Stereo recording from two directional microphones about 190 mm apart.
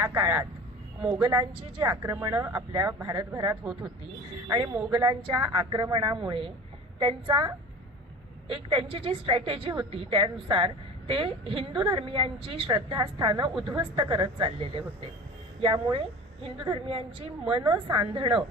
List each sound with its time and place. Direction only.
0.0 s speech: 10° right (ahead or behind)
1.9 s speech: 20° right (ahead or behind)
3.1 s a woman's voice: 20° right (ahead or behind)
3.6 s speech: 5° right (ahead or behind)
4.9 s a woman's voice: 25° right (ahead or behind)